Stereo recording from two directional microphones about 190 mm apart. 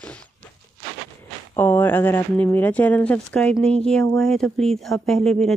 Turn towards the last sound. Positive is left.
turn(degrees=0)  # may be behind; listen again after turning